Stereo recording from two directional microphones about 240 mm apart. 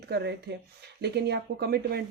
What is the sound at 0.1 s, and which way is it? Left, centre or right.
Speech, right.